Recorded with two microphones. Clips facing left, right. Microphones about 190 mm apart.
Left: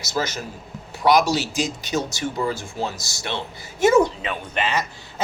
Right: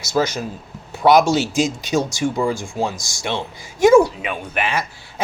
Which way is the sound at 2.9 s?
5° left (ahead or behind).